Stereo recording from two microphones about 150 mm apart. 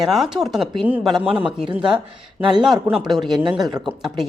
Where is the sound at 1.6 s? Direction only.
35° right (ahead or behind).